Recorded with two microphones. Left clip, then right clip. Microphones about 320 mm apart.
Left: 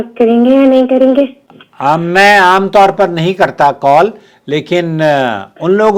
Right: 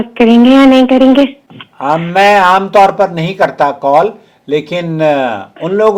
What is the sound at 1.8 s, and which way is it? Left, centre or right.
A man's voice, left.